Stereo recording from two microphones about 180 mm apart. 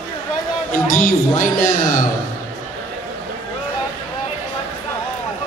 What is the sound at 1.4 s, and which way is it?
Speech, 45° left (ahead or behind).